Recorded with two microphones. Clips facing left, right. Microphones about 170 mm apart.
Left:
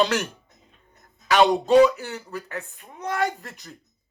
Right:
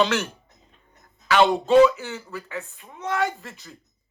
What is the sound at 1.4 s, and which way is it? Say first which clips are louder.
Speech: even; 15° left (ahead or behind).